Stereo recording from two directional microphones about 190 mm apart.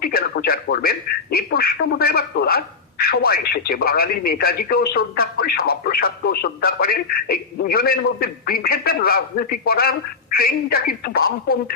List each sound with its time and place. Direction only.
0.0 s a man's voice: 50° left (ahead or behind)